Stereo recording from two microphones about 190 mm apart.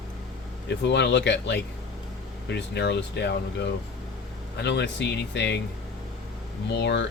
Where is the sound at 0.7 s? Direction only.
65° left (ahead or behind).